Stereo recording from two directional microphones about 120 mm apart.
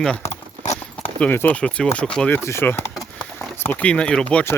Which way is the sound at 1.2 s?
15° left (ahead or behind).